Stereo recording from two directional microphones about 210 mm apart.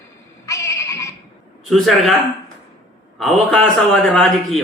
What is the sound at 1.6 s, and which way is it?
Speech, centre (ahead or behind).